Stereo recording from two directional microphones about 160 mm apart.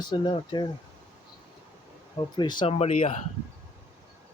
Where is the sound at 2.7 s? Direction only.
45° left (ahead or behind).